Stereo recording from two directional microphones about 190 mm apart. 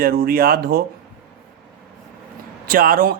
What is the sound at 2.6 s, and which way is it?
Speech, 50° right (ahead or behind).